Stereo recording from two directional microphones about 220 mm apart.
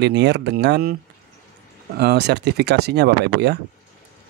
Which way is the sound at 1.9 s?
50° right (ahead or behind).